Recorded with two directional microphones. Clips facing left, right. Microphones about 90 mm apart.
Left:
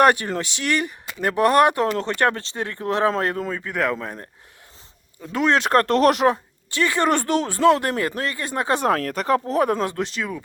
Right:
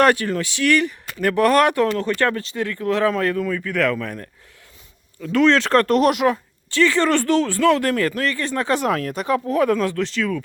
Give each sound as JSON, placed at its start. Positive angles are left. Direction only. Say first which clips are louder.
{"t": 0.0, "sound": "speech", "louder": "even", "side_deg": 20}
{"t": 5.2, "sound": "speech", "louder": "right 4 dB", "side_deg": 20}
{"t": 5.8, "sound": "speech", "louder": "even", "side_deg": 35}
{"t": 6.7, "sound": "speech", "louder": "right 3 dB", "side_deg": 20}
{"t": 8.9, "sound": "speech", "louder": "left 1 dB", "side_deg": 45}
{"t": 9.5, "sound": "speech", "louder": "right 2 dB", "side_deg": 25}